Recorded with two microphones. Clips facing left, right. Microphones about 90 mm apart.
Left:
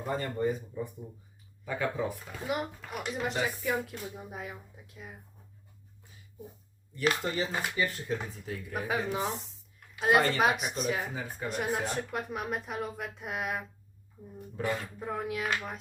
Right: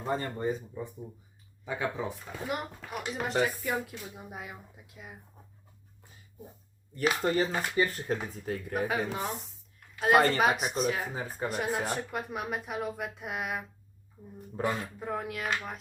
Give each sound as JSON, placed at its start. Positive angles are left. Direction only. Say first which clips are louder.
{"t": 0.0, "sound": "speech", "louder": "even", "side_deg": -25}
{"t": 1.6, "sound": "speech", "louder": "left 1 dB", "side_deg": -20}
{"t": 2.5, "sound": "speech", "louder": "left 2 dB", "side_deg": 0}
{"t": 7.3, "sound": "speech", "louder": "right 4 dB", "side_deg": -40}
{"t": 8.7, "sound": "speech", "louder": "even", "side_deg": -5}
{"t": 11.1, "sound": "speech", "louder": "right 2 dB", "side_deg": -35}
{"t": 11.4, "sound": "speech", "louder": "right 1 dB", "side_deg": 0}
{"t": 14.9, "sound": "speech", "louder": "left 1 dB", "side_deg": 0}